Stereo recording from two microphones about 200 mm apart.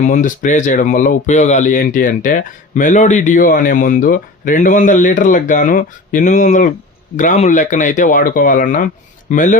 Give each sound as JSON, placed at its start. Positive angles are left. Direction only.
{"t": 0.0, "sound": "speech", "side_deg": 40}